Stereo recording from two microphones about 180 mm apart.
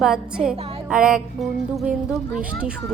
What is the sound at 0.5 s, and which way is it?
Music, 35° right (ahead or behind).